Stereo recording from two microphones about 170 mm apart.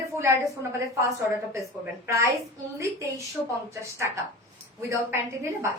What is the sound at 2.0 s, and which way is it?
Speech, 15° right (ahead or behind).